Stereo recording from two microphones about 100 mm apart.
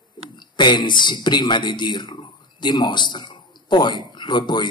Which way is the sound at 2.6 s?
50° left (ahead or behind).